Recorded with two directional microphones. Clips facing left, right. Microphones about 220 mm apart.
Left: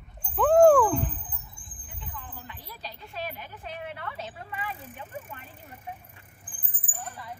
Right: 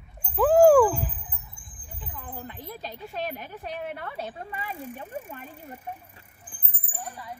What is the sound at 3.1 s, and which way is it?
A woman's voice, 45° right (ahead or behind).